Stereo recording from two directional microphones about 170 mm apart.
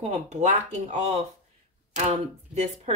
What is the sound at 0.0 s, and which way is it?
Speech, 40° right (ahead or behind).